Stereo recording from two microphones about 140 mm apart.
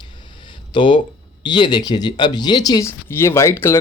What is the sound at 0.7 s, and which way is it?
Speech, 35° left (ahead or behind).